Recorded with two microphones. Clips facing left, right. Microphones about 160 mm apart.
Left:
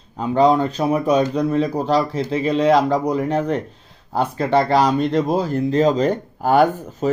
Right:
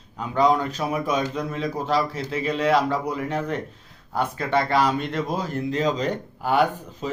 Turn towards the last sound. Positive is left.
turn(degrees=45)  # may be behind; listen again after turning